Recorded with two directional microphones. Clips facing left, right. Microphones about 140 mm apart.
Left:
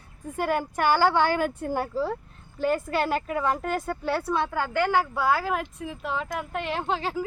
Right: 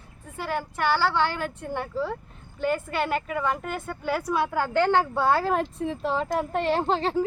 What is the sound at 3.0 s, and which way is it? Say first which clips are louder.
Speech: left 1 dB; centre (ahead or behind).